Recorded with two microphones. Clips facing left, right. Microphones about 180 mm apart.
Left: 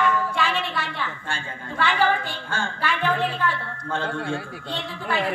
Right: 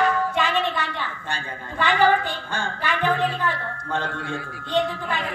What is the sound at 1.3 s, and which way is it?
A woman's voice, 15° right (ahead or behind).